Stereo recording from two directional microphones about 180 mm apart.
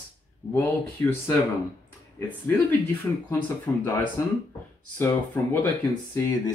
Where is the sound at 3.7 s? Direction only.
5° left (ahead or behind).